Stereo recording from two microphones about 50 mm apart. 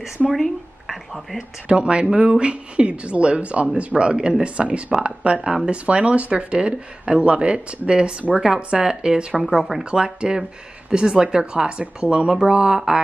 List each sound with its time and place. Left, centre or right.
0.4 s speech: centre
1.7 s speech: right
9.8 s speech: centre